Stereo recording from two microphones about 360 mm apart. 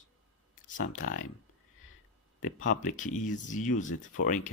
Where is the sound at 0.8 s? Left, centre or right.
Left.